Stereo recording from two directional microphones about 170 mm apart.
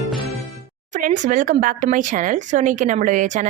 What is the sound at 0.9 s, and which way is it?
A woman's voice, 50° right (ahead or behind).